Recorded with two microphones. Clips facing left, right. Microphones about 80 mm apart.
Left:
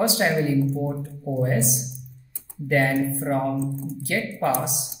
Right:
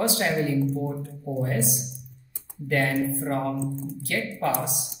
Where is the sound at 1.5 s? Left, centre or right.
Left.